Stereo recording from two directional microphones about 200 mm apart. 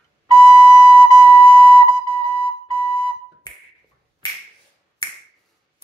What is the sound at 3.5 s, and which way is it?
Finger snapping, 20° left (ahead or behind).